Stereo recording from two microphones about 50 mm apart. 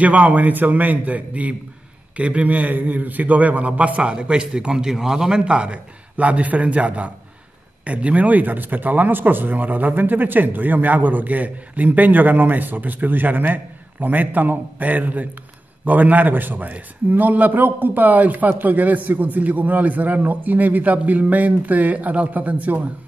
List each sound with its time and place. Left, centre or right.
0.0 s a man's voice: right